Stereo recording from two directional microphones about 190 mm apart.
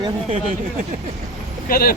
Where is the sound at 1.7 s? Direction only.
50° left (ahead or behind).